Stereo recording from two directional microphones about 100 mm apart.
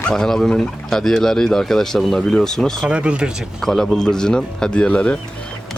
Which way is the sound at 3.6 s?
5° left (ahead or behind).